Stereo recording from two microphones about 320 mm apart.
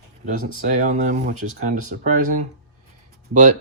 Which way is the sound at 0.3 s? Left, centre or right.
Right.